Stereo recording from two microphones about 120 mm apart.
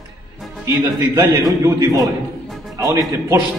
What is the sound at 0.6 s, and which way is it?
A man's voice, 20° right (ahead or behind).